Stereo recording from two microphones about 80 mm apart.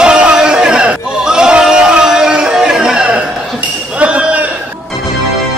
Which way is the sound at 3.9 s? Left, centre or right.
Centre.